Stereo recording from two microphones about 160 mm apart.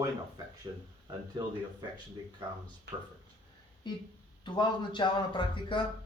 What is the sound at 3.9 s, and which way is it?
Speech, 25° left (ahead or behind).